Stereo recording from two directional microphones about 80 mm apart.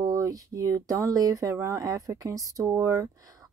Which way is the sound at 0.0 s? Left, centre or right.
Right.